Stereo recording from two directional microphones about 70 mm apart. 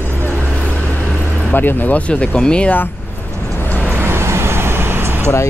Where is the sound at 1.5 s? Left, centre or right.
Left.